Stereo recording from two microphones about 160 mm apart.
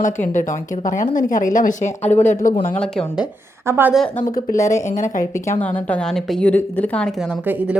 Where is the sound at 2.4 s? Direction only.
60° left (ahead or behind).